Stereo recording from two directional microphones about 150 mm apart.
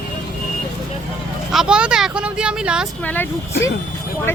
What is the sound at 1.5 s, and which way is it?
Speech, 5° right (ahead or behind).